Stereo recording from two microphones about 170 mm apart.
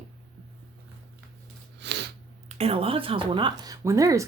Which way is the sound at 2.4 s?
40° right (ahead or behind).